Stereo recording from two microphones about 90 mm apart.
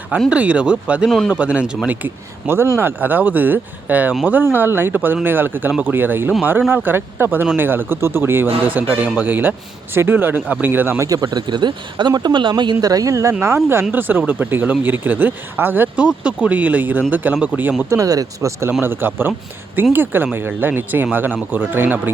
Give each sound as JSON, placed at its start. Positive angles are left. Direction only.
{"t": 0.3, "sound": "speech", "side_deg": -15}
{"t": 1.0, "sound": "a man's voice", "side_deg": 5}
{"t": 1.3, "sound": "speech", "side_deg": -15}
{"t": 11.1, "sound": "speech", "side_deg": -50}
{"t": 12.8, "sound": "speech", "side_deg": -45}
{"t": 13.9, "sound": "speech", "side_deg": -20}
{"t": 17.8, "sound": "speech", "side_deg": -40}
{"t": 18.8, "sound": "speech", "side_deg": -25}